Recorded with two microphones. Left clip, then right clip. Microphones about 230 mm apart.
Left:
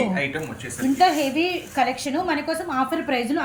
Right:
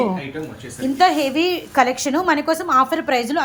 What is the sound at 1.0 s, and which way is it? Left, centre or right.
A woman's voice, centre.